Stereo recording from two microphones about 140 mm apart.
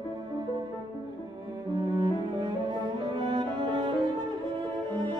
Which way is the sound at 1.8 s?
30° right (ahead or behind).